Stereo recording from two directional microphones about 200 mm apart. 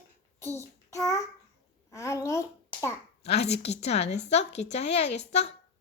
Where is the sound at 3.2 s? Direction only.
30° left (ahead or behind).